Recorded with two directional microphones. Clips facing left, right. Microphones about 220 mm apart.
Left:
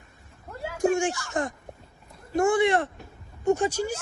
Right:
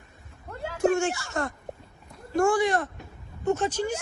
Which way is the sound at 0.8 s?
15° left (ahead or behind).